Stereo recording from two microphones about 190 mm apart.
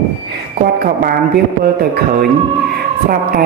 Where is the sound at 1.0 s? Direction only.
50° right (ahead or behind).